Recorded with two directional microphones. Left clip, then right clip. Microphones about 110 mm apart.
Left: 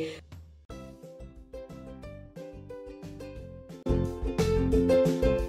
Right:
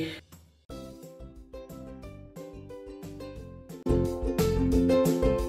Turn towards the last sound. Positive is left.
turn(degrees=0)  # may be behind; listen again after turning